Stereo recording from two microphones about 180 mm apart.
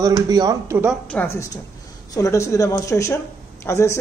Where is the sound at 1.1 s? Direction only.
10° left (ahead or behind).